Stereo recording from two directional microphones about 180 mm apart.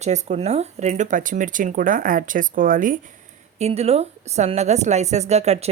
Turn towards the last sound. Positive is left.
turn(degrees=-35)  # may be behind; listen again after turning